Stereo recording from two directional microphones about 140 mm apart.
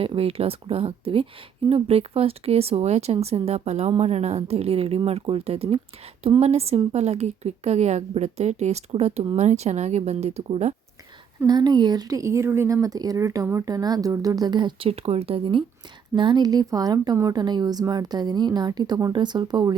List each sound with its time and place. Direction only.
0.0 s speech: 45° right (ahead or behind)
11.4 s speech: 30° right (ahead or behind)